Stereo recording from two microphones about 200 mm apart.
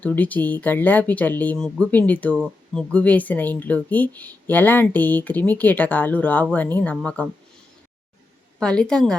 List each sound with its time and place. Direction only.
0.0 s speech: 10° left (ahead or behind)
8.5 s a woman's voice: 5° left (ahead or behind)